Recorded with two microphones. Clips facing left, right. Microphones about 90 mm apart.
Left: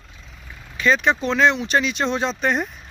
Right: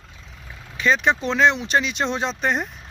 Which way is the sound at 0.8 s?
20° right (ahead or behind).